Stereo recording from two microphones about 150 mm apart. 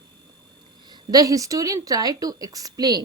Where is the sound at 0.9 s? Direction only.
25° right (ahead or behind).